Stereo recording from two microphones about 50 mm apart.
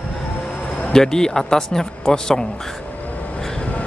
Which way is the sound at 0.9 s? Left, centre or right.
Centre.